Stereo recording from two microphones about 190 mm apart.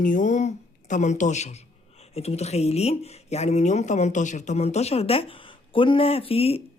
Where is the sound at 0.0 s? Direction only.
45° left (ahead or behind).